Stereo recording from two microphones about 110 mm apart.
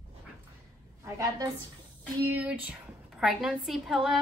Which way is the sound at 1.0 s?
30° right (ahead or behind).